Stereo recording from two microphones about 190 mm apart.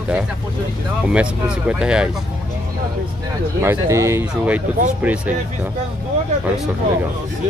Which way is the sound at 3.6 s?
15° right (ahead or behind).